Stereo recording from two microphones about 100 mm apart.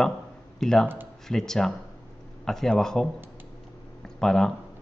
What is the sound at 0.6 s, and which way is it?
Speech, 5° left (ahead or behind).